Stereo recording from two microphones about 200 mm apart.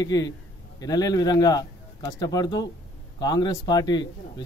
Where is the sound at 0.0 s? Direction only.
20° left (ahead or behind).